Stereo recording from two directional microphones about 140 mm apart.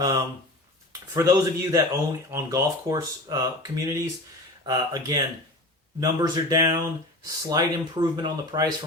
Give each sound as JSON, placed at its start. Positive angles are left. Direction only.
{"t": 0.0, "sound": "speech", "side_deg": -25}